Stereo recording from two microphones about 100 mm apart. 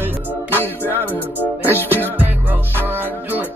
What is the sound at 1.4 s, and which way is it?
Music, 20° left (ahead or behind).